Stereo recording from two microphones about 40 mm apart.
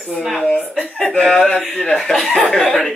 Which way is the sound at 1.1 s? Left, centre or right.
Centre.